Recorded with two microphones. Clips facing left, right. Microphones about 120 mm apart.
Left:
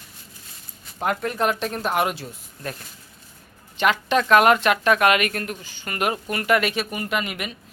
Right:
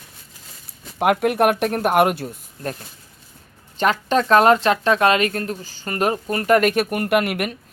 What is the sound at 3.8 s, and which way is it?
Speech, 40° right (ahead or behind).